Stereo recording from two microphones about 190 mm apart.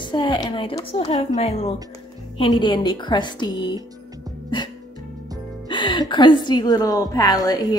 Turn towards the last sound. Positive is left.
turn(degrees=20)  # may be behind; listen again after turning